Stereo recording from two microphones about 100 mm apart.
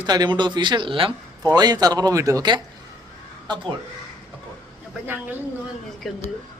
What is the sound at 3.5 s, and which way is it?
Speech, 55° right (ahead or behind).